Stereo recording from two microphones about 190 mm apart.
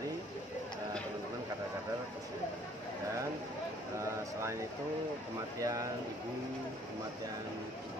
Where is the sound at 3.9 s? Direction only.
15° right (ahead or behind).